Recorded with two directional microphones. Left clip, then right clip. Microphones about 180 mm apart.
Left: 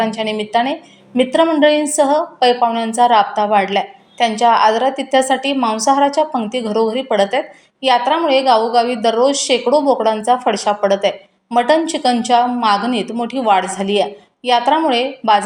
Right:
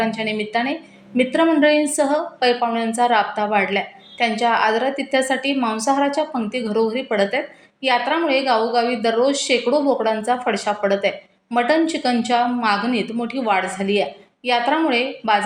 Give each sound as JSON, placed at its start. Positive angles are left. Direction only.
{"t": 0.0, "sound": "a woman's voice", "side_deg": 25}